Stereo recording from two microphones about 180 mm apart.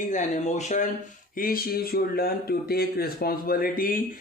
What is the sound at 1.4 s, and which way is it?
Speech, 50° left (ahead or behind).